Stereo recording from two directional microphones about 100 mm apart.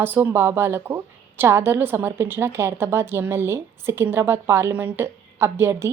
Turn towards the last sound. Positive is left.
turn(degrees=-25)  # may be behind; listen again after turning